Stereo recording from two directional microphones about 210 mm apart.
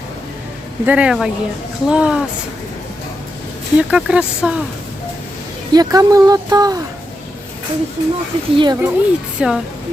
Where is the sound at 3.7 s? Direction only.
5° right (ahead or behind).